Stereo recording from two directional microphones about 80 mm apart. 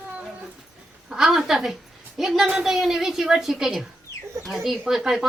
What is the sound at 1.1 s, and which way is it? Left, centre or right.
A woman's voice, centre.